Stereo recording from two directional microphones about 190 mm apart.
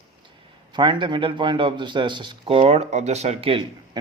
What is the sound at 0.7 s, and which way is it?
A man's voice, 25° right (ahead or behind).